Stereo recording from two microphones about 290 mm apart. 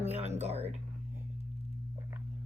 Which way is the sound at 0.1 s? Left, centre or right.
Right.